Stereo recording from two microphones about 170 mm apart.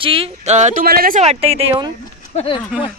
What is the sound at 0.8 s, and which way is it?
Speech, 60° right (ahead or behind).